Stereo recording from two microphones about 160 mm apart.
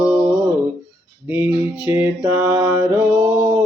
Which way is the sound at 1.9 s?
15° right (ahead or behind).